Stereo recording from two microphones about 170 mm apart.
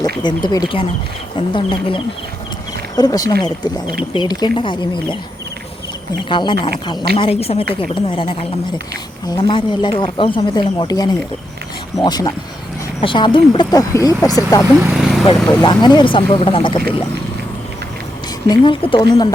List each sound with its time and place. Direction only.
0.2 s speech: 25° left (ahead or behind)
6.2 s speech: 30° left (ahead or behind)
14.8 s vehicle: 5° right (ahead or behind)
15.4 s speech: 25° left (ahead or behind)
18.4 s speech: 25° left (ahead or behind)